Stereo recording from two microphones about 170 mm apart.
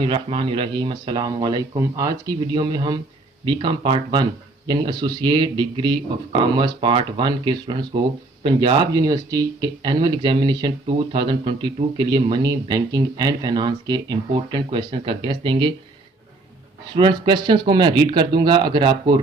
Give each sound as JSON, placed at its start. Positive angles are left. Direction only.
{"t": 0.1, "sound": "speech", "side_deg": -30}
{"t": 16.9, "sound": "speech", "side_deg": -30}